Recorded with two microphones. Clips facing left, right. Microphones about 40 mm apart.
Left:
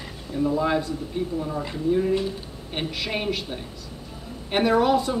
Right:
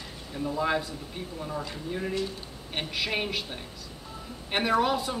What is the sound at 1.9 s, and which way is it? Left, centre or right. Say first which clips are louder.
Speech: left 10 dB; centre.